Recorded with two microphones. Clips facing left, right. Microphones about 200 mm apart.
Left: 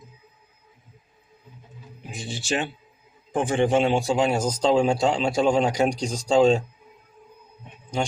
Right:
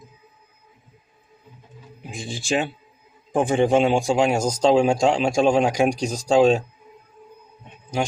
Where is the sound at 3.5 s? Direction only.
10° right (ahead or behind).